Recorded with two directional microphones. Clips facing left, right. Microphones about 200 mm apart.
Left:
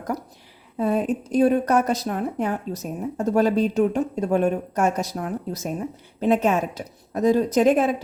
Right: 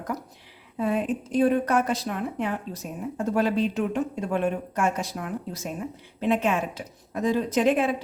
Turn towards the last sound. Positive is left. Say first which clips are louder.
# left 4 dB
turn(degrees=45)  # may be behind; listen again after turning